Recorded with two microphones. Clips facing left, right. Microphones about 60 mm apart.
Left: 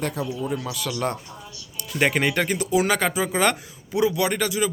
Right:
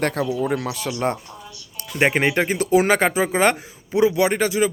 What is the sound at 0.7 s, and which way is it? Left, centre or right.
Speech, right.